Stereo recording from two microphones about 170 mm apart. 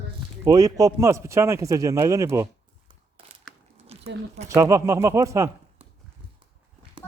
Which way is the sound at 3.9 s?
35° right (ahead or behind).